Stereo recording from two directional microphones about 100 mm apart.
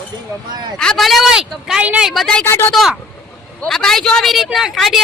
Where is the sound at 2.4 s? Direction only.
25° left (ahead or behind).